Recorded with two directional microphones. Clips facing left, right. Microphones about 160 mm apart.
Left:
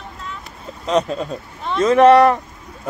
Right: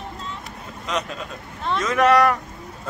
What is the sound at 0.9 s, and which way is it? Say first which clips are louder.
Speech: left 9 dB; 35° left (ahead or behind).